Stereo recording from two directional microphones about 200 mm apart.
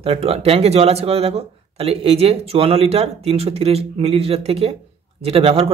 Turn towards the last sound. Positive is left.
turn(degrees=-30)  # may be behind; listen again after turning